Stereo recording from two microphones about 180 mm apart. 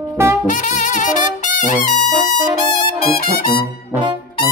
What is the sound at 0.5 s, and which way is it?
Brass instrument, 45° left (ahead or behind).